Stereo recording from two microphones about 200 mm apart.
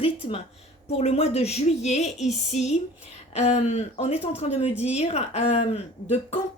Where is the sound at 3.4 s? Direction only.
35° left (ahead or behind).